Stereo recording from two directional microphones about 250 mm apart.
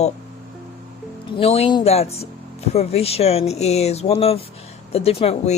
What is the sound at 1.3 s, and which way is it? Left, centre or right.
Speech, left.